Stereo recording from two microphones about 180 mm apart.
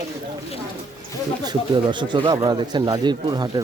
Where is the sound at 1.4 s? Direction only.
25° right (ahead or behind).